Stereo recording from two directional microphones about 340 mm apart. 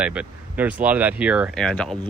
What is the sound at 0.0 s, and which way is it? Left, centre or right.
Speech, centre.